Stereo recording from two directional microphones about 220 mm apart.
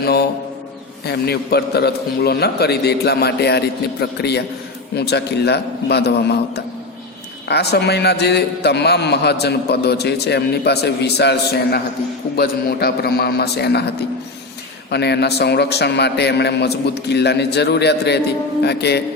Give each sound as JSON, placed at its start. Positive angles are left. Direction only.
{"t": 0.0, "sound": "mantra", "side_deg": 45}
{"t": 1.0, "sound": "a man's voice", "side_deg": 45}
{"t": 7.4, "sound": "a man's voice", "side_deg": 50}
{"t": 14.8, "sound": "a man's voice", "side_deg": 50}